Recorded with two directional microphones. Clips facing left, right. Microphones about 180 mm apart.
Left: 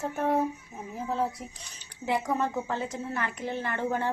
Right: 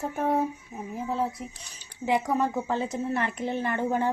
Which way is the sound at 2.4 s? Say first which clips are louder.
Right 3 dB; 15° right (ahead or behind).